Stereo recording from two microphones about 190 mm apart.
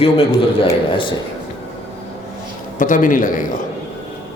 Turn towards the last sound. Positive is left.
turn(degrees=45)  # may be behind; listen again after turning